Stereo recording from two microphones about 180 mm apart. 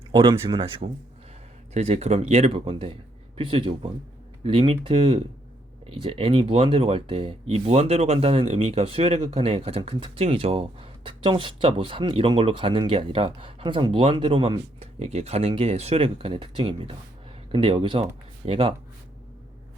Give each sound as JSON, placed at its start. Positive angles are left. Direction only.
{"t": 0.1, "sound": "speech", "side_deg": -25}